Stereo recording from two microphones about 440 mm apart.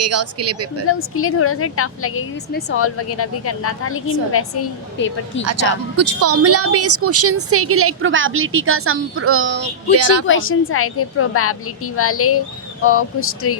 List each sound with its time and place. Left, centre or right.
0.0 s a woman's voice: right
0.9 s a woman's voice: left
5.4 s a woman's voice: right
10.2 s a woman's voice: left